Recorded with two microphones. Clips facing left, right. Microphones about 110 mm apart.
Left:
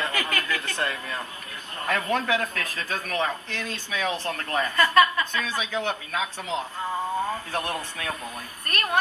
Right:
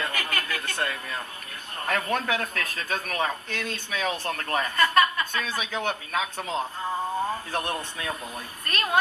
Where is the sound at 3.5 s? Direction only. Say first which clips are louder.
Even; 30° left (ahead or behind).